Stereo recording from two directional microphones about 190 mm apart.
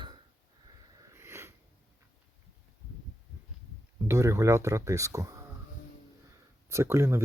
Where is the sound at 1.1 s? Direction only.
15° right (ahead or behind).